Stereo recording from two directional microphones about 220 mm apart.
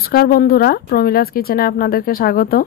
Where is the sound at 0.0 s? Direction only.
45° left (ahead or behind).